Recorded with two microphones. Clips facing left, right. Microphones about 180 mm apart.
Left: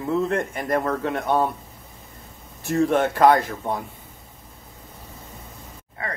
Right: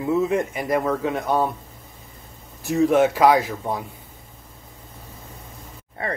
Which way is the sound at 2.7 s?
Centre (ahead or behind).